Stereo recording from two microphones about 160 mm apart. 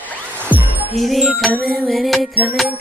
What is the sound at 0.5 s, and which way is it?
Music, 10° right (ahead or behind).